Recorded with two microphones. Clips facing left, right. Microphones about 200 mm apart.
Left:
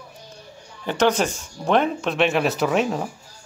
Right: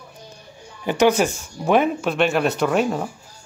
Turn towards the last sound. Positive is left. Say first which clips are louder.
# right 1 dB
turn(degrees=0)  # may be behind; listen again after turning